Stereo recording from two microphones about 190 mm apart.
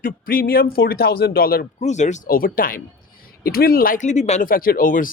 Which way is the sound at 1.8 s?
40° left (ahead or behind).